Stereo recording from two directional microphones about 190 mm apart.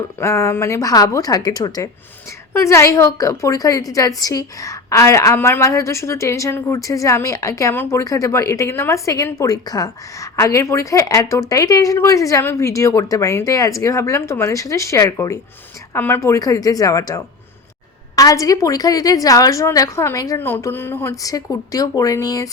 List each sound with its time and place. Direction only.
0.2 s a woman's voice: 15° left (ahead or behind)